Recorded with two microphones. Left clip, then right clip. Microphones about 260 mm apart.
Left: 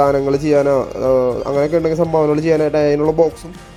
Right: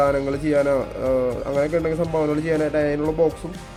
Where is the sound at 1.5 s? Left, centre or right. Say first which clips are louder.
Left 6 dB; centre.